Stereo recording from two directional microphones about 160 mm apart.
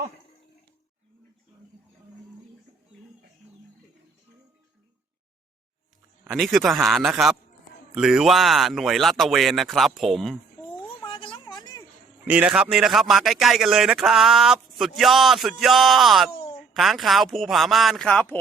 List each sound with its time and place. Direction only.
6.2 s a man's voice: centre (ahead or behind)
10.8 s a sound: 30° left (ahead or behind)
12.2 s a man's voice: 10° right (ahead or behind)